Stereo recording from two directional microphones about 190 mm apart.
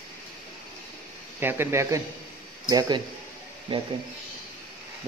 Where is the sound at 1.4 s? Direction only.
10° right (ahead or behind); by 3.8 s 30° right (ahead or behind).